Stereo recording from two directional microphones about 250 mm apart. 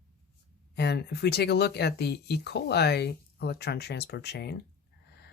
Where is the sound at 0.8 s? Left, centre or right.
Left.